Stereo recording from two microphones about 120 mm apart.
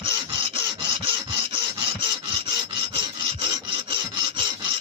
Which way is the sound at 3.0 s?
50° right (ahead or behind).